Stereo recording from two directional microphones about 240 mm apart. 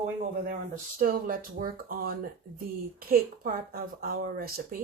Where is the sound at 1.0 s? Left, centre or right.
Right.